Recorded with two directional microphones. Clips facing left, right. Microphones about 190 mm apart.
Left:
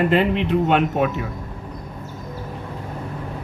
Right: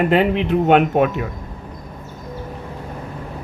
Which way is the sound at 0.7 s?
55° right (ahead or behind).